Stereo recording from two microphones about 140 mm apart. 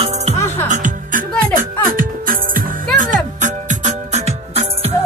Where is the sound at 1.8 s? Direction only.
85° right.